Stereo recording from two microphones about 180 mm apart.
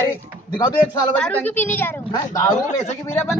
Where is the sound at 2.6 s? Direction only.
40° left (ahead or behind).